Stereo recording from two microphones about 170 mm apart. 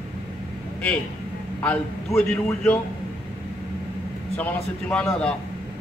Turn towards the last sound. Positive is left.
turn(degrees=5)  # may be behind; listen again after turning